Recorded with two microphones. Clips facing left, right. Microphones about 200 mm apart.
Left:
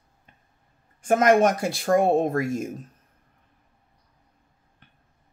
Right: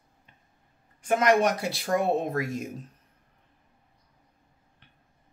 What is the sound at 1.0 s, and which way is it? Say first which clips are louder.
Speech: left 4 dB; 45° left (ahead or behind).